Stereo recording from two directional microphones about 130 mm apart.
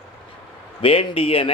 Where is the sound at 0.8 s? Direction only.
45° left (ahead or behind).